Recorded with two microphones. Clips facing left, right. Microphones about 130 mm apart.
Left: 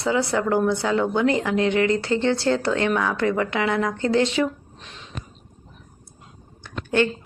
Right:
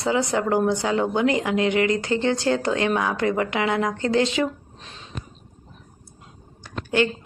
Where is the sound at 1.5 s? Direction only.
20° right (ahead or behind).